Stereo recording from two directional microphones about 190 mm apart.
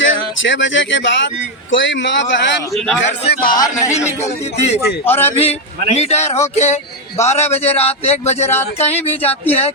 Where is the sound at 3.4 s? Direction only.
20° left (ahead or behind).